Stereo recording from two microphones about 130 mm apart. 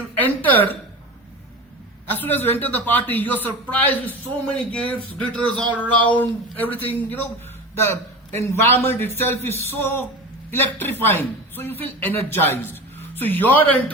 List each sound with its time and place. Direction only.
0.2 s a woman's voice: 15° left (ahead or behind)
2.0 s a man's voice: 15° left (ahead or behind)
8.4 s a man's voice: 20° left (ahead or behind)